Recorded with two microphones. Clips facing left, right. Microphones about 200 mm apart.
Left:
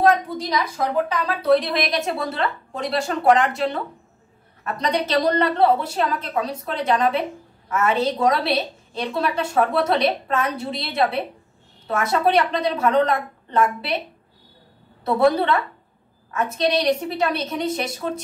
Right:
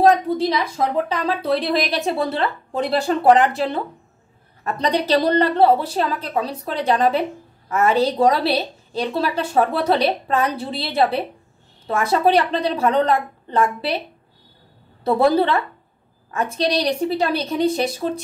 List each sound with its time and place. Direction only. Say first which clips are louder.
0.0 s a woman's voice: right 3 dB; 30° right (ahead or behind)
4.7 s a woman's voice: right 3 dB; 30° right (ahead or behind)
15.0 s a woman's voice: right 2 dB; 30° right (ahead or behind)